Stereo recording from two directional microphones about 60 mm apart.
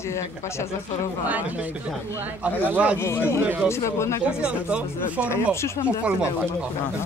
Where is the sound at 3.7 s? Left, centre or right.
Left.